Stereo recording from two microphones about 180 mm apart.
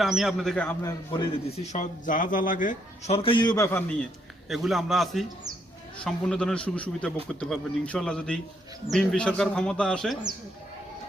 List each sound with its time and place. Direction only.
0.0 s speech: centre (ahead or behind)
0.8 s a man's voice: 20° left (ahead or behind)
1.6 s a man's voice: 40° left (ahead or behind); by 10.2 s 5° left (ahead or behind)